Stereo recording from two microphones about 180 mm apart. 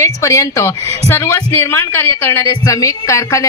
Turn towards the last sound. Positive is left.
turn(degrees=15)  # may be behind; listen again after turning